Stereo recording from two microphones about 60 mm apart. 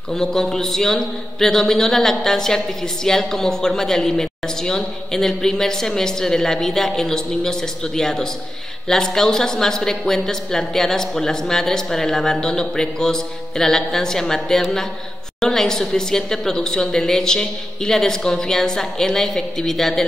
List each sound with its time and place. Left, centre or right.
0.1 s a man's voice: centre